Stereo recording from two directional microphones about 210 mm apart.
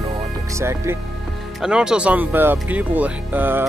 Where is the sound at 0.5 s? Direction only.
10° right (ahead or behind).